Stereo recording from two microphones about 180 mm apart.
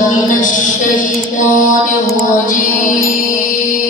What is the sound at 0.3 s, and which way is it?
Music, 45° left (ahead or behind).